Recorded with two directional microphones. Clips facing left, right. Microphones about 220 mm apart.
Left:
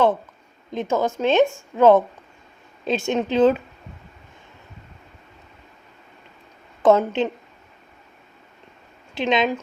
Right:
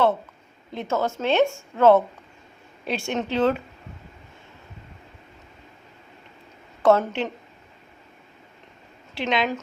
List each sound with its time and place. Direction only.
0.7 s a woman's voice: 15° left (ahead or behind)
6.8 s a woman's voice: 20° left (ahead or behind)
9.1 s speech: 20° left (ahead or behind)